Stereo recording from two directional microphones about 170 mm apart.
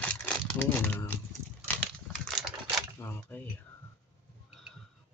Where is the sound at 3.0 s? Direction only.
10° left (ahead or behind).